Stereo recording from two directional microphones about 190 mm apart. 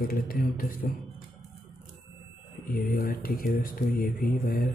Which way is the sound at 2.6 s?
50° left (ahead or behind).